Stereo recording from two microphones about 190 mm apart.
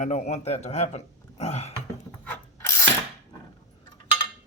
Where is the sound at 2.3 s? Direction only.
15° left (ahead or behind).